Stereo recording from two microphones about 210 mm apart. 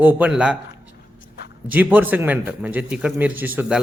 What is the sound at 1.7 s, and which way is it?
Speech, 10° right (ahead or behind).